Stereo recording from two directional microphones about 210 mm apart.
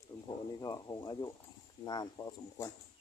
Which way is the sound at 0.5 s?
20° left (ahead or behind).